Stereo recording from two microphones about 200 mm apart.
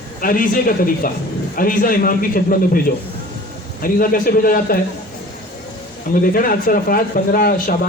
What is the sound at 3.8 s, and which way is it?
Speech, 45° left (ahead or behind).